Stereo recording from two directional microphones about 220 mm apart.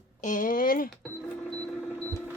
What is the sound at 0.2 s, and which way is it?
Speech, 35° left (ahead or behind).